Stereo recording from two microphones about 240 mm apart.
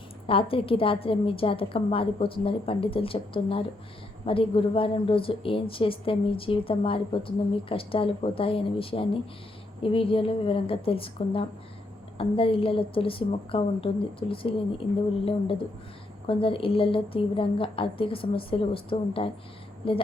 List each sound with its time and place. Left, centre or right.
0.3 s speech: left